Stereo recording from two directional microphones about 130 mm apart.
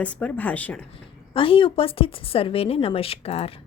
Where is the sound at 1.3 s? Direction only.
45° left (ahead or behind).